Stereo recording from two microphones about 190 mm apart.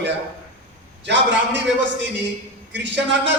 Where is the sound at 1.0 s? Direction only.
70° right (ahead or behind).